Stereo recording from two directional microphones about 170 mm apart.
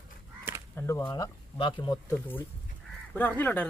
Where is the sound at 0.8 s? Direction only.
15° left (ahead or behind).